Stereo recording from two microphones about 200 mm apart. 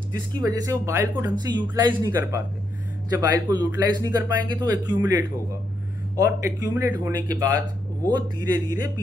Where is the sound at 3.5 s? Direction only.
20° right (ahead or behind).